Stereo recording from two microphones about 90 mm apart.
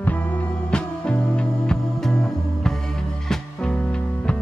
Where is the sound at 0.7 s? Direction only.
10° left (ahead or behind).